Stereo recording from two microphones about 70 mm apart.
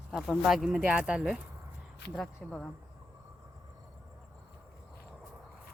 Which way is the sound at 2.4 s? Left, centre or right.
Centre.